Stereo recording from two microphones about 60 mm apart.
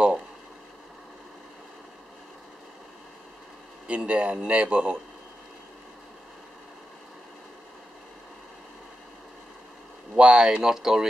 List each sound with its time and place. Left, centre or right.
3.8 s speech: right
10.1 s speech: centre